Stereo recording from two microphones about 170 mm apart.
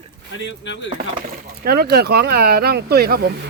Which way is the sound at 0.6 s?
90° left.